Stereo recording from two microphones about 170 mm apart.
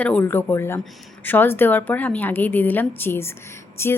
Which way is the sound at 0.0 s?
10° left (ahead or behind).